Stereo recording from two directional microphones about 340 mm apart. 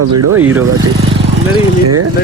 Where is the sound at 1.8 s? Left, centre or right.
Right.